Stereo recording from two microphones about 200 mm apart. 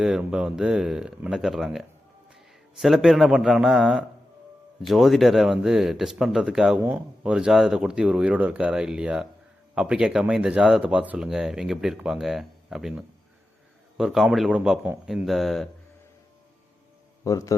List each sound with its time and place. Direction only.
0.0 s a man's voice: 5° right (ahead or behind)
17.2 s a man's voice: 15° left (ahead or behind)